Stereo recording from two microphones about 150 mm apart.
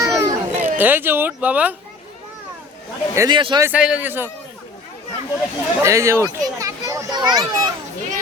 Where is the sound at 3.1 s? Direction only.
20° right (ahead or behind).